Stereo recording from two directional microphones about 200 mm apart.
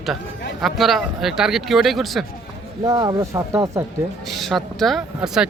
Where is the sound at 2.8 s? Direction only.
20° right (ahead or behind).